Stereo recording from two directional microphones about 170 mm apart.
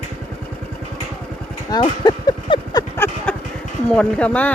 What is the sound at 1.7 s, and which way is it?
Speech, 20° left (ahead or behind).